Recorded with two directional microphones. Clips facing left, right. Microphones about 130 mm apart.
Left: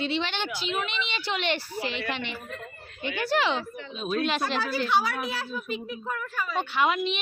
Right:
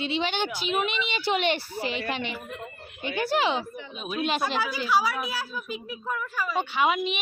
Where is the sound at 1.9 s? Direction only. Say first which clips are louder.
Right 1 dB; 45° right (ahead or behind).